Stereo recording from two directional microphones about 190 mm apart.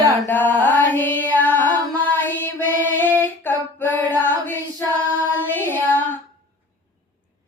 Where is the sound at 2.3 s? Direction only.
10° left (ahead or behind).